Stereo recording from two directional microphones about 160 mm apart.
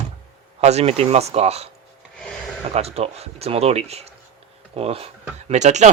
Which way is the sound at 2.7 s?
40° right (ahead or behind).